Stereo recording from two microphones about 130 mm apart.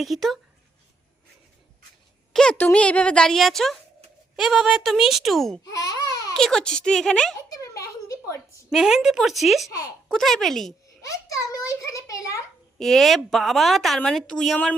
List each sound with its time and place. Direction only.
0.0 s a woman's voice: centre (ahead or behind)
2.3 s a woman's voice: 5° left (ahead or behind)
5.6 s speech: 25° left (ahead or behind)
6.3 s a woman's voice: 5° left (ahead or behind)
7.5 s a sound: 25° left (ahead or behind)
8.7 s a woman's voice: 5° right (ahead or behind)
9.6 s a child's voice: 25° left (ahead or behind)
10.1 s a woman's voice: centre (ahead or behind)
11.0 s a child's voice: 25° left (ahead or behind)
12.8 s a woman's voice: centre (ahead or behind)